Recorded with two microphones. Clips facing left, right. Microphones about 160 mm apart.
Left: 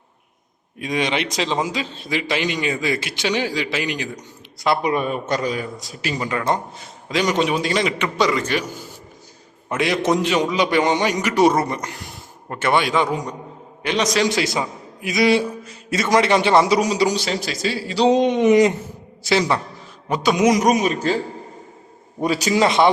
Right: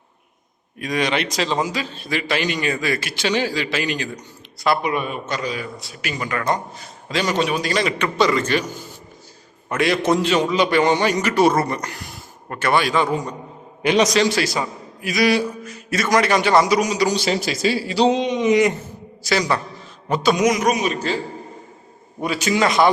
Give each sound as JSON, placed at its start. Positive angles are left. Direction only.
{"t": 0.8, "sound": "a man's voice", "side_deg": 20}
{"t": 4.8, "sound": "a man's voice", "side_deg": 35}
{"t": 9.6, "sound": "a man's voice", "side_deg": 20}
{"t": 13.8, "sound": "a man's voice", "side_deg": -10}
{"t": 14.3, "sound": "a man's voice", "side_deg": 20}
{"t": 17.2, "sound": "speech", "side_deg": -5}
{"t": 18.1, "sound": "speech", "side_deg": 50}
{"t": 19.3, "sound": "a man's voice", "side_deg": 25}
{"t": 20.4, "sound": "a man's voice", "side_deg": 35}
{"t": 22.2, "sound": "a man's voice", "side_deg": 40}